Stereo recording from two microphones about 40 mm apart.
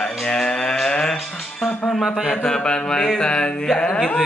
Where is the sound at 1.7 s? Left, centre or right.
Left.